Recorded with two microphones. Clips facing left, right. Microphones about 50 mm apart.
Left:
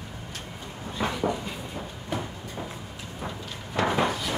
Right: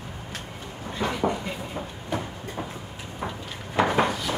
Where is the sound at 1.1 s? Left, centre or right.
Right.